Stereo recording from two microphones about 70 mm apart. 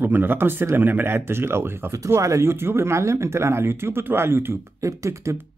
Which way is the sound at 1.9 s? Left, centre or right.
Right.